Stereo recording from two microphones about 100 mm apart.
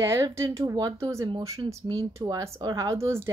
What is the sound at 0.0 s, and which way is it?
Speech, 30° right (ahead or behind).